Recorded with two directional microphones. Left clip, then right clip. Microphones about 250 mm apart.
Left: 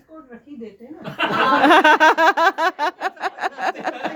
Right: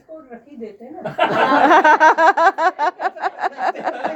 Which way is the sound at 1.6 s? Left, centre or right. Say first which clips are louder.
Right 1 dB; left.